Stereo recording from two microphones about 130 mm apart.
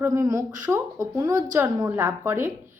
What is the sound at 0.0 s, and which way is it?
A woman's voice, 25° right (ahead or behind).